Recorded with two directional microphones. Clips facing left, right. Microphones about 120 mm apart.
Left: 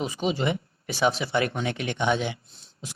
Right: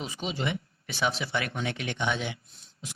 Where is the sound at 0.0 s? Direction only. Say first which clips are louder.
Left 6 dB; 45° left (ahead or behind).